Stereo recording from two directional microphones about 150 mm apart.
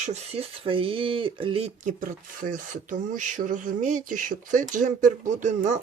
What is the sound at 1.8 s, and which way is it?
Speech, 60° right (ahead or behind).